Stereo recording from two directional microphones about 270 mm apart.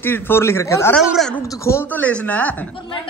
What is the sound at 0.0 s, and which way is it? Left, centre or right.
Speech, centre.